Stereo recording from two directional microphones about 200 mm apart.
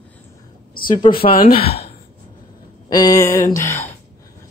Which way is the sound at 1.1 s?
25° left (ahead or behind).